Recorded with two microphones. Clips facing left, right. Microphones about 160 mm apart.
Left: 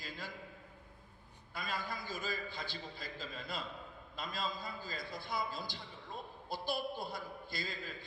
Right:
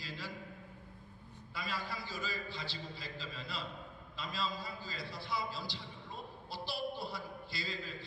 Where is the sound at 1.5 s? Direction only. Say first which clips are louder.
Even; 50° left (ahead or behind).